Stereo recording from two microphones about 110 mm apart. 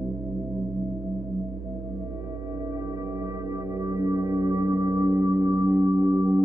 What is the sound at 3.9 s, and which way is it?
Singing bowl, 30° right (ahead or behind).